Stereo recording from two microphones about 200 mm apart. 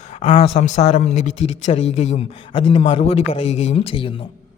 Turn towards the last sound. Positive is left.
turn(degrees=30)  # may be behind; listen again after turning